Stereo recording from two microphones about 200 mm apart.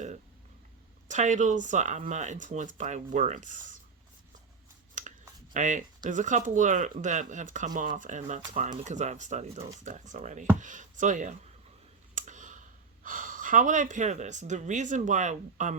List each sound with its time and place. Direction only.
1.0 s speech: 35° right (ahead or behind)
5.0 s a sound: 40° right (ahead or behind)
5.5 s speech: 40° right (ahead or behind)